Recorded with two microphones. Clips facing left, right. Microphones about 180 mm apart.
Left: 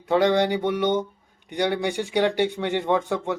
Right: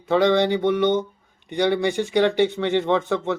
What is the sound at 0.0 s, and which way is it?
Speech, 10° left (ahead or behind).